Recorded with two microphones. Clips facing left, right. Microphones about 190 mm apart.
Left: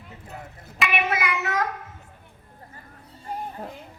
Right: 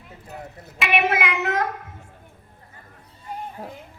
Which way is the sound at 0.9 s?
65° right (ahead or behind).